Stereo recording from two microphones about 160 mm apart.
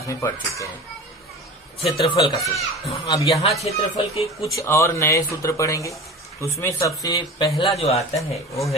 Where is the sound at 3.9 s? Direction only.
35° left (ahead or behind).